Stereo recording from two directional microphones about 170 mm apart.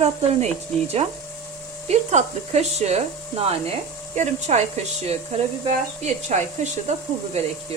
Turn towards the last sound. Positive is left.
turn(degrees=-40)  # may be behind; listen again after turning